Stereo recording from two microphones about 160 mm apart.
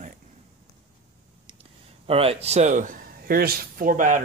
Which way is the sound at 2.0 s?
35° right (ahead or behind).